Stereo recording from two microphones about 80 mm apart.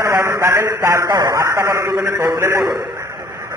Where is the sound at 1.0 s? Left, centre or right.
Right.